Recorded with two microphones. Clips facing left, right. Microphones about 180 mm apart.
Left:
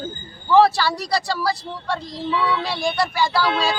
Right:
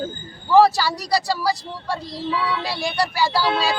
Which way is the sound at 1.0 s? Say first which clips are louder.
Right 1 dB; 35° right (ahead or behind).